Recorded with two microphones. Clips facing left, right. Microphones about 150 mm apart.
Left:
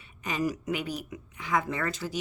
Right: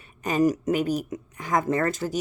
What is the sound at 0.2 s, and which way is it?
A woman's voice, 45° right (ahead or behind).